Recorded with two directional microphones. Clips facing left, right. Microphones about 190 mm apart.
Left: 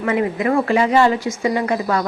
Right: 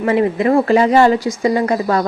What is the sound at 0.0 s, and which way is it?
Speech, 30° right (ahead or behind).